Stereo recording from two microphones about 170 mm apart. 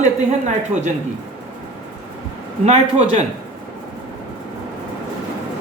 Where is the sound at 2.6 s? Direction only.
40° right (ahead or behind).